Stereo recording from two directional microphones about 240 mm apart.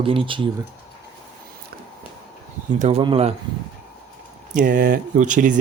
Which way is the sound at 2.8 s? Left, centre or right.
Right.